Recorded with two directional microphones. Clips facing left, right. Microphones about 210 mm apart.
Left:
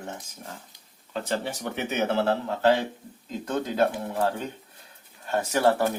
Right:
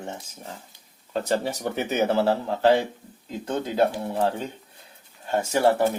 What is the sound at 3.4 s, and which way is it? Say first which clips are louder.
Speech: right 2 dB; 25° right (ahead or behind).